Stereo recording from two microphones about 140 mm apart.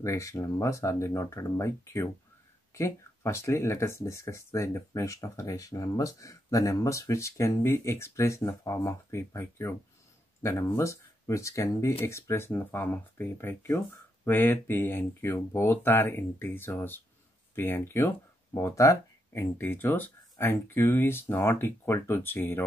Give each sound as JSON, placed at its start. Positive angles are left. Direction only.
{"t": 0.0, "sound": "speech", "side_deg": 20}